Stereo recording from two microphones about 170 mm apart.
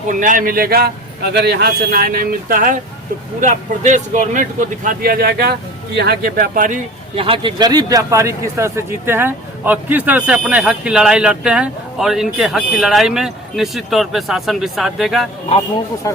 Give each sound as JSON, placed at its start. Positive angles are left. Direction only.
{"t": 0.1, "sound": "speech", "side_deg": -50}
{"t": 7.2, "sound": "a man's voice", "side_deg": -30}
{"t": 16.0, "sound": "speech", "side_deg": 20}